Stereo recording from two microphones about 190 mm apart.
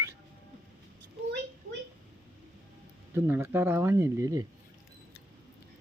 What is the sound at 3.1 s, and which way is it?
Speech, 10° right (ahead or behind).